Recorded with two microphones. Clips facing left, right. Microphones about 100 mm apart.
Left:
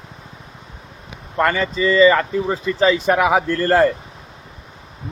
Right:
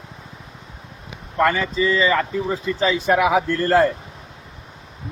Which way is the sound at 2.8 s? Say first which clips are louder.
Left 2 dB; 60° left (ahead or behind).